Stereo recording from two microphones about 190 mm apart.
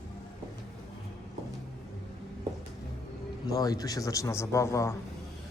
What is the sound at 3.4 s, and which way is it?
Speech, 20° left (ahead or behind).